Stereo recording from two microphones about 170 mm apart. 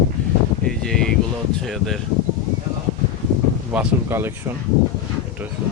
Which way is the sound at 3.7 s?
10° right (ahead or behind).